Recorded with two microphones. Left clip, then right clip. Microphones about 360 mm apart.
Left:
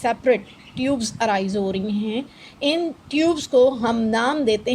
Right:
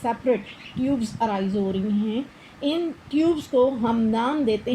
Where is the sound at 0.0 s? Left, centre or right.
Left.